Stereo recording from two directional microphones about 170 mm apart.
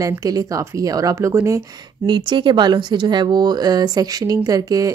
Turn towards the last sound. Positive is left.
turn(degrees=-20)  # may be behind; listen again after turning